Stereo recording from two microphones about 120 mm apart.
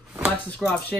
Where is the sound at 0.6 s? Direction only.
5° right (ahead or behind).